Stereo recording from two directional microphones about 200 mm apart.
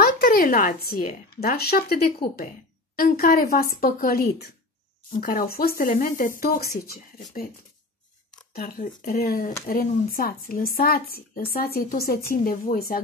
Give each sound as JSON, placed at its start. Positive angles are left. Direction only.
{"t": 0.0, "sound": "a woman's voice", "side_deg": 45}
{"t": 8.5, "sound": "speech", "side_deg": 50}